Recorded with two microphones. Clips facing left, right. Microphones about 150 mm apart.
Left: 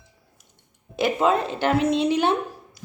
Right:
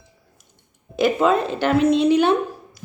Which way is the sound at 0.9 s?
20° left (ahead or behind).